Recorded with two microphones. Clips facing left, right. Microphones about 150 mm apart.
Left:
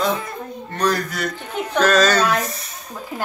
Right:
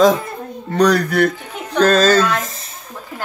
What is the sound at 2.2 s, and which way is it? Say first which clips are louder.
Speech: right 2 dB; centre (ahead or behind).